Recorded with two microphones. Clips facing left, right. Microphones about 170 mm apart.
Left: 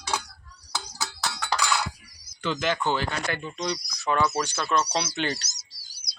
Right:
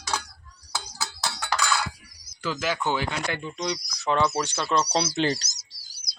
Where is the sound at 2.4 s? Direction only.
5° right (ahead or behind); by 4.9 s 20° right (ahead or behind).